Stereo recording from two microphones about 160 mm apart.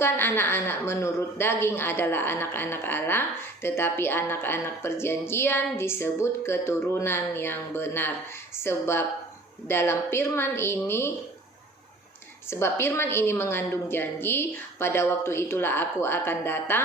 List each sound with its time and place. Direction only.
0.0 s a woman's voice: 15° left (ahead or behind)
12.5 s a woman's voice: 15° left (ahead or behind)